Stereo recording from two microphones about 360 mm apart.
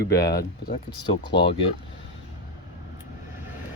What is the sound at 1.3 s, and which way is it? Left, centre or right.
Speech, left.